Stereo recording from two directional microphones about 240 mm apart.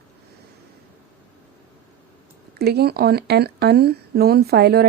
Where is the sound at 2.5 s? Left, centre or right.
Right.